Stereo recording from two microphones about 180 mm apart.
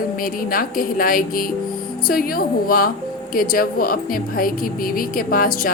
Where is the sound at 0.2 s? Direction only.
50° left (ahead or behind).